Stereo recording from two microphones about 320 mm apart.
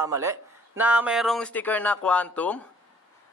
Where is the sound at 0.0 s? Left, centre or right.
Centre.